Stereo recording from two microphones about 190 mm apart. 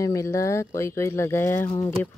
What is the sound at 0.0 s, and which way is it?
Speech, 15° left (ahead or behind).